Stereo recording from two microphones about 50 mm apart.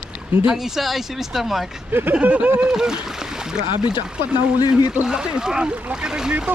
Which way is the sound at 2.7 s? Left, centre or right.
Centre.